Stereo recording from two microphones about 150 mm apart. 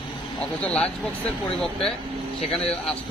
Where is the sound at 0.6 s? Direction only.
10° left (ahead or behind).